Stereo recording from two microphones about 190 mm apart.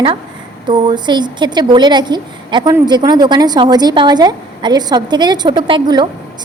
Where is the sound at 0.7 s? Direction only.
25° right (ahead or behind).